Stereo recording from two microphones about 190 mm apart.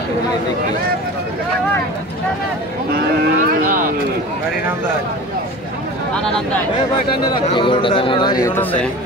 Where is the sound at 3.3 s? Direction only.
50° right (ahead or behind).